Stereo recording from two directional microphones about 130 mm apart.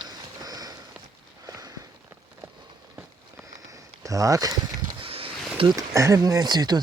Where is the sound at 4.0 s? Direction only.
25° right (ahead or behind).